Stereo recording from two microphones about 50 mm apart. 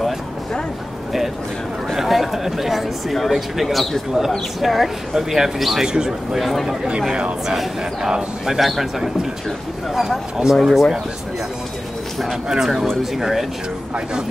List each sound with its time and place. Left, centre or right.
2.0 s speech: centre
5.9 s speech: centre
6.3 s speech: centre
6.8 s speech: centre
12.4 s speech: centre